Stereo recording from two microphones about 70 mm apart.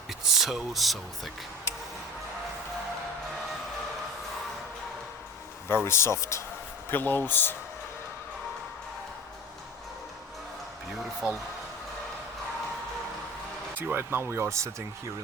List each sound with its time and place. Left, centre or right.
0.1 s speech: centre
5.6 s speech: left
6.9 s speech: left
13.7 s speech: right